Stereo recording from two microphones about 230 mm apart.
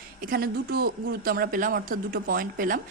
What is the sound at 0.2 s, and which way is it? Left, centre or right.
Speech, right.